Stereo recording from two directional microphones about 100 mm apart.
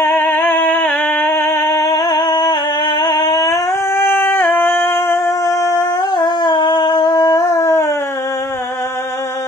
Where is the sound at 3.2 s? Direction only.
30° left (ahead or behind).